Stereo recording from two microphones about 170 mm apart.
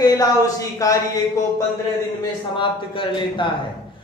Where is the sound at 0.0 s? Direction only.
20° left (ahead or behind).